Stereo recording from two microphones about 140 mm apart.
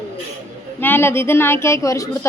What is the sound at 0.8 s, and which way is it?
A woman's voice, 15° left (ahead or behind).